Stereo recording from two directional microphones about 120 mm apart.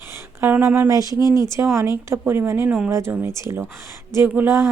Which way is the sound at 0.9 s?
30° right (ahead or behind).